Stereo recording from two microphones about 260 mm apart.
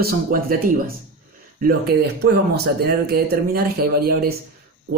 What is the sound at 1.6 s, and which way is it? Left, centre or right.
Speech, right.